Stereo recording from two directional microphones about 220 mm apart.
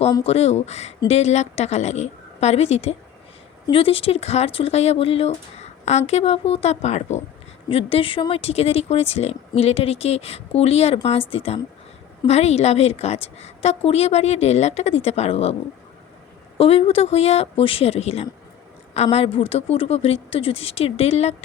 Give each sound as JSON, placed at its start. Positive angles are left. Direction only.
{"t": 0.3, "sound": "speech", "side_deg": 30}
{"t": 16.6, "sound": "speech", "side_deg": 25}